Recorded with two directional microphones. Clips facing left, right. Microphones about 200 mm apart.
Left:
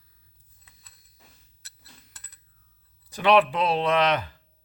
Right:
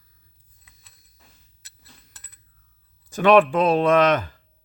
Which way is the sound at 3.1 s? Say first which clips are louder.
Right 5 dB; 50° right (ahead or behind).